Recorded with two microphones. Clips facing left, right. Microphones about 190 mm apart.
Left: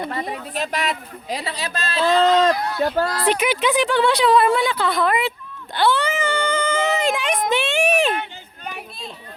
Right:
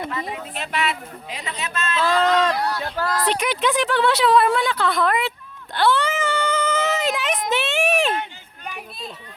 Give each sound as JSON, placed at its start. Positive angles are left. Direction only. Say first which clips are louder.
{"t": 0.1, "sound": "speech", "louder": "left 2 dB", "side_deg": 35}
{"t": 2.7, "sound": "speech", "louder": "left 8 dB", "side_deg": 45}
{"t": 3.2, "sound": "speech", "louder": "left 2 dB", "side_deg": 5}
{"t": 5.7, "sound": "whimper", "louder": "even", "side_deg": 0}
{"t": 7.5, "sound": "a sound", "louder": "left 1 dB", "side_deg": 0}